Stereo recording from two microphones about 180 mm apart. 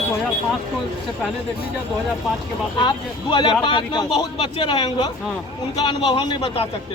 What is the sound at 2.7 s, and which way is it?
A man's voice, 25° left (ahead or behind).